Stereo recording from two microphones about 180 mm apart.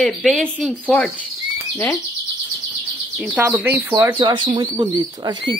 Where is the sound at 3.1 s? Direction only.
5° right (ahead or behind).